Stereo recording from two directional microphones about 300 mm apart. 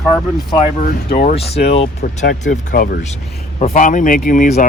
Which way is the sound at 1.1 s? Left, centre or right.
Left.